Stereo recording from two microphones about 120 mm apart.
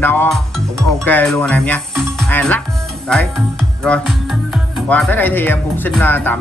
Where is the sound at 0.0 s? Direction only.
15° left (ahead or behind).